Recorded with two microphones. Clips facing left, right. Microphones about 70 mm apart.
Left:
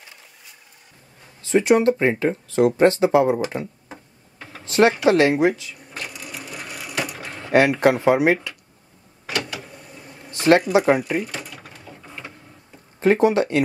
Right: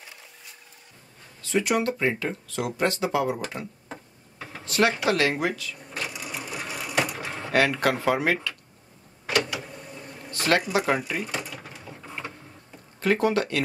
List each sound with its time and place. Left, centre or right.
1.4 s speech: left
4.6 s speech: left
6.0 s sewing machine: centre
7.5 s speech: left
10.3 s a sound: left
10.7 s speech: left
11.1 s a sound: centre
13.0 s speech: left